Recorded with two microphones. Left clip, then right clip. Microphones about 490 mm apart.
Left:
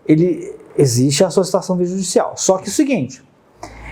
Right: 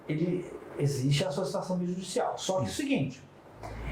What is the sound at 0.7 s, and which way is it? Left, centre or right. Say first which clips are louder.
Speech: left 17 dB; left.